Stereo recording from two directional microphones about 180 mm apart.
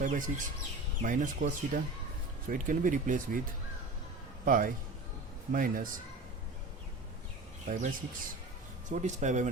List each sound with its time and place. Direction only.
0.0 s speech: 45° right (ahead or behind)
4.4 s speech: 50° right (ahead or behind)
7.7 s speech: 45° right (ahead or behind)